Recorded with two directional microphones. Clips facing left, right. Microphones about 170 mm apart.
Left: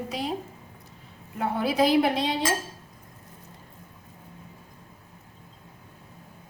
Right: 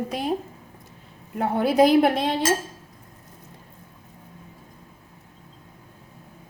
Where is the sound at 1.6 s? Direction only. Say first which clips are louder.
Right 5 dB; 50° right (ahead or behind).